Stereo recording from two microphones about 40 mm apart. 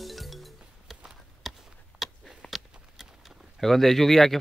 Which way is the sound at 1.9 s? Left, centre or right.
Right.